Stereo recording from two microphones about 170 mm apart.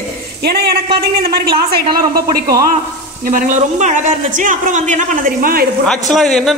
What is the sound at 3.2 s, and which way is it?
A man's voice, 50° right (ahead or behind).